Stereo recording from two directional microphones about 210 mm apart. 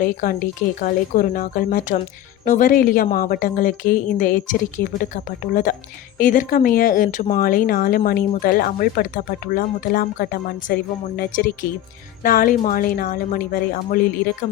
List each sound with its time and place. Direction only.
0.0 s a woman's voice: 40° left (ahead or behind)